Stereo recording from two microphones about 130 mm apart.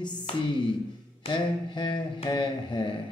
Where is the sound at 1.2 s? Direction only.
40° left (ahead or behind).